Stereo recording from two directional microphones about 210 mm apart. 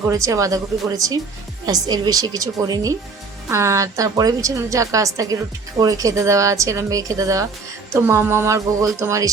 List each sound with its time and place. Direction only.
0.1 s a woman's voice: 15° right (ahead or behind)